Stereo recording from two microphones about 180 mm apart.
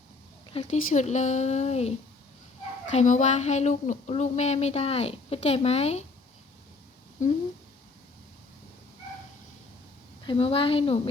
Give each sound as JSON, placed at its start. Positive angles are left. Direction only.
{"t": 0.5, "sound": "speech", "side_deg": 40}
{"t": 2.9, "sound": "speech", "side_deg": 40}
{"t": 7.2, "sound": "speech", "side_deg": 40}
{"t": 10.2, "sound": "speech", "side_deg": 30}